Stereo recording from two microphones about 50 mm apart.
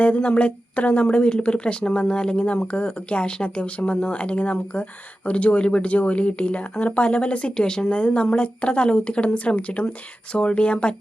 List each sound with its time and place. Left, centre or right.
0.0 s speech: left